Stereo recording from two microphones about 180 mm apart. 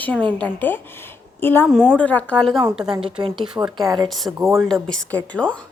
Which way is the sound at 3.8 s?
20° right (ahead or behind).